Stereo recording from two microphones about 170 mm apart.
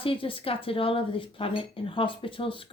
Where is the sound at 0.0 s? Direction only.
30° left (ahead or behind).